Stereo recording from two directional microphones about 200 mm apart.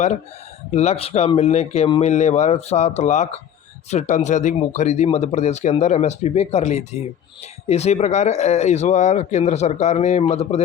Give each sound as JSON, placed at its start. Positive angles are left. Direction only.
{"t": 0.7, "sound": "speech", "side_deg": 35}